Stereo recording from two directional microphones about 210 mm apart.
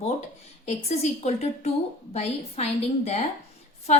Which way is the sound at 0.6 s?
30° left (ahead or behind).